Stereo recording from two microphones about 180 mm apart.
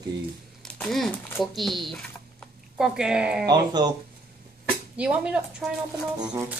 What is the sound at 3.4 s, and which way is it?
Speech, 20° right (ahead or behind).